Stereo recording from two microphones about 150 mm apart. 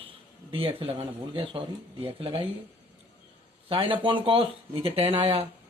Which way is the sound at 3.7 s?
35° right (ahead or behind).